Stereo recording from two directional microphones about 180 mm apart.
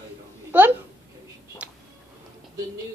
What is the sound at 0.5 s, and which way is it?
Speech, 10° right (ahead or behind).